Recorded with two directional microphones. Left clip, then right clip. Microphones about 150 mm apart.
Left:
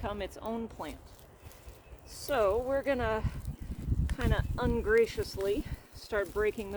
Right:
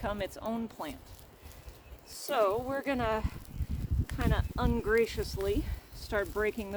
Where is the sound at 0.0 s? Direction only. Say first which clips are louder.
Right 2 dB; 35° right (ahead or behind).